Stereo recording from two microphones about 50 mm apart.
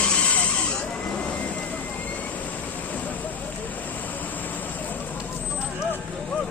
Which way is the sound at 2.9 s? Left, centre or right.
Left.